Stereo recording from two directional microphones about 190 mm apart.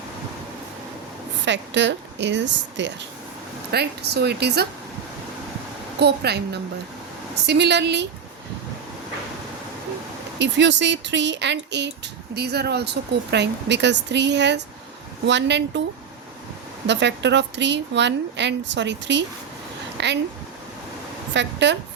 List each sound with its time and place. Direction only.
1.5 s a woman's voice: 70° right (ahead or behind)
3.7 s speech: 60° right (ahead or behind)
6.0 s speech: 60° right (ahead or behind)
10.3 s a woman's voice: 70° right (ahead or behind)
16.8 s a woman's voice: 65° right (ahead or behind)
20.0 s a sound: 65° right (ahead or behind)
21.3 s a woman's voice: 70° right (ahead or behind)